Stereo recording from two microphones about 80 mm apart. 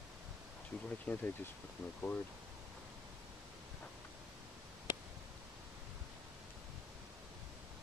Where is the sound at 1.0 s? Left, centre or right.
Left.